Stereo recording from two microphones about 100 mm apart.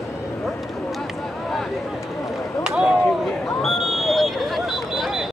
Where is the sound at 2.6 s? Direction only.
5° right (ahead or behind).